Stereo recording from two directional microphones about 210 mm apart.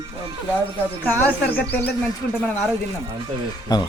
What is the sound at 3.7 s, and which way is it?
Speech, 20° left (ahead or behind).